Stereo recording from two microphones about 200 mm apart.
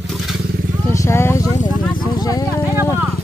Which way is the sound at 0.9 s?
15° left (ahead or behind).